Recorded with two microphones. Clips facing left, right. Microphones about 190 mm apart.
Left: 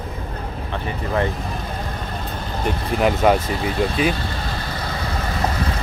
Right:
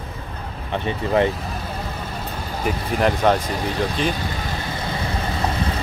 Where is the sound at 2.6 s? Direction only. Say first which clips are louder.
Left 1 dB; centre (ahead or behind).